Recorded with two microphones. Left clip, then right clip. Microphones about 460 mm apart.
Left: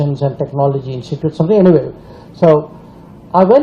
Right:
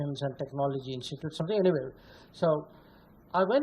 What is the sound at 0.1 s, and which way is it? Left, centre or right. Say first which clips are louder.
Speech: left 16 dB; right.